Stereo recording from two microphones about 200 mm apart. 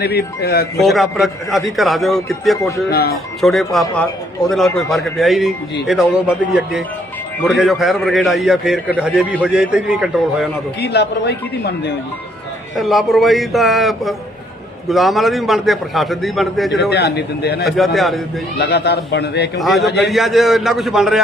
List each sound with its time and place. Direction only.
0.0 s speech: 50° left (ahead or behind)
0.8 s a man's voice: centre (ahead or behind)
2.6 s speech: 15° left (ahead or behind)
2.9 s speech: 50° left (ahead or behind)
3.4 s a man's voice: centre (ahead or behind)
10.8 s speech: 55° left (ahead or behind)
12.7 s a man's voice: centre (ahead or behind)
16.9 s speech: 55° left (ahead or behind)
17.6 s a man's voice: centre (ahead or behind)
18.6 s speech: 60° left (ahead or behind)
19.5 s a man's voice: centre (ahead or behind)